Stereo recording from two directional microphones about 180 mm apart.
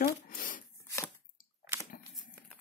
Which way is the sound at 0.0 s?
50° left (ahead or behind).